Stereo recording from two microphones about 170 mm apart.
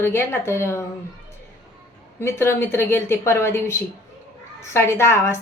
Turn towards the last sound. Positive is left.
turn(degrees=15)  # may be behind; listen again after turning